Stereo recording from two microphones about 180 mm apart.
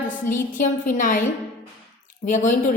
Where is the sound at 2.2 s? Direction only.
45° left (ahead or behind).